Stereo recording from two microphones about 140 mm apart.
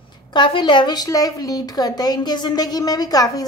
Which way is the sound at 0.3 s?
35° left (ahead or behind).